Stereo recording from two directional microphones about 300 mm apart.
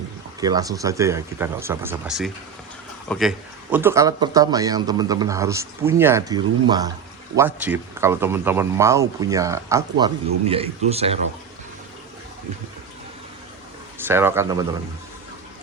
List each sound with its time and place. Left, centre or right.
0.3 s a man's voice: centre
14.0 s a man's voice: centre